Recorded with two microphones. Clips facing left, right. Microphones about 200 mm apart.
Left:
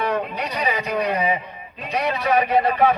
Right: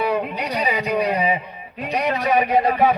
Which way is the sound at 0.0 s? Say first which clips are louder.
Right 2 dB; 10° right (ahead or behind).